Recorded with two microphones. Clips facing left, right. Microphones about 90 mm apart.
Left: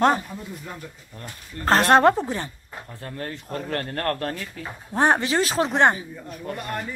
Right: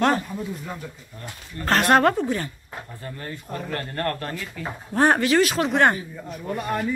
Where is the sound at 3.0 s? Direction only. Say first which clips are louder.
Left 4 dB; 60° left (ahead or behind).